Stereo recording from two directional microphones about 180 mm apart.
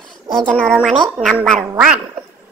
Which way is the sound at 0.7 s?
Centre (ahead or behind).